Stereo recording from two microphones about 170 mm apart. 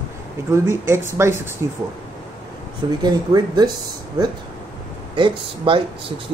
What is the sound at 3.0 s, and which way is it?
Speech, 25° right (ahead or behind).